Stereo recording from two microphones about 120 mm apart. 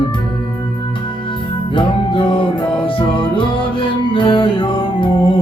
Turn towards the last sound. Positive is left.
turn(degrees=45)  # may be behind; listen again after turning